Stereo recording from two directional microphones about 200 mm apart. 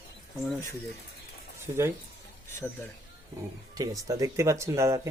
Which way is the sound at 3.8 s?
15° right (ahead or behind).